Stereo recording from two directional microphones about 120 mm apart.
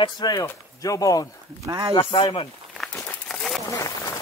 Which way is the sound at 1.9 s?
45° left (ahead or behind).